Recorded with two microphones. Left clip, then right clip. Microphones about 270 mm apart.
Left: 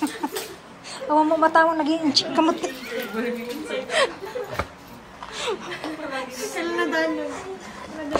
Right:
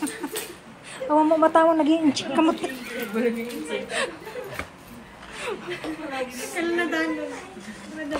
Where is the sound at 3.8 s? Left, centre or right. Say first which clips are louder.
Left 8 dB; centre.